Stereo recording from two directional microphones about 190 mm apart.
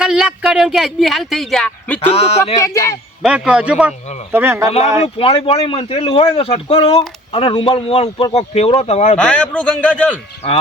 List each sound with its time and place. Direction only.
0.0 s speech: 5° right (ahead or behind)
2.0 s a man's voice: 35° left (ahead or behind)
2.6 s speech: 15° left (ahead or behind)
3.2 s a man's voice: 5° right (ahead or behind)
5.0 s a man's voice: 30° left (ahead or behind)
9.1 s a man's voice: 5° left (ahead or behind)
10.4 s a man's voice: 30° left (ahead or behind)